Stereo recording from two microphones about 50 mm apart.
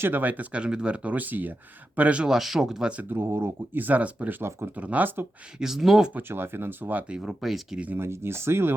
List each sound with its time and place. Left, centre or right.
0.0 s speech: right
0.6 s speech: centre; by 1.5 s right
2.0 s speech: right
2.2 s speech: centre
3.2 s speech: right
3.8 s speech: right
4.4 s speech: right
4.7 s speech: right
5.5 s speech: centre
6.1 s speech: right
7.2 s speech: centre
7.9 s speech: right